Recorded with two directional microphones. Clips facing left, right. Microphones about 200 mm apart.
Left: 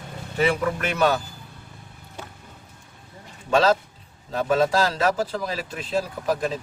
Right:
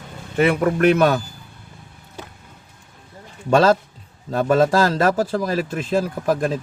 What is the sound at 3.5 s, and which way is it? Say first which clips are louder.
Speech: right 4 dB; 50° right (ahead or behind).